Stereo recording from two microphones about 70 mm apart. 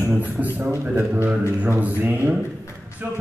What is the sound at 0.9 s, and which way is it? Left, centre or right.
A man's voice, right.